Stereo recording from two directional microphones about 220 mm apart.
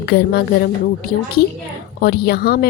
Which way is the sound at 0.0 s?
45° left (ahead or behind).